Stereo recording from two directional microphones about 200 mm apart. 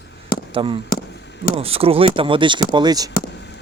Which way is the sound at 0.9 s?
45° left (ahead or behind).